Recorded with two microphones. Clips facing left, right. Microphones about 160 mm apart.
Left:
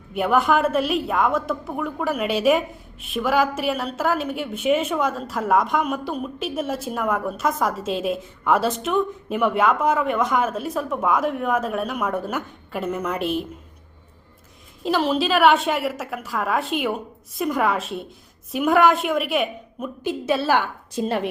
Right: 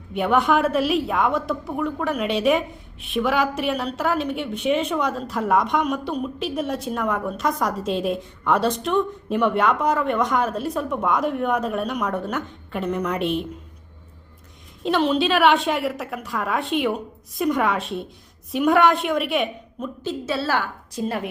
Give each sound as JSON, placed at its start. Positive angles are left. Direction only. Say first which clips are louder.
{"t": 0.1, "sound": "a woman's voice", "louder": "even", "side_deg": 0}
{"t": 14.8, "sound": "a woman's voice", "louder": "right 1 dB", "side_deg": 0}
{"t": 20.1, "sound": "a woman's voice", "louder": "left 4 dB", "side_deg": 15}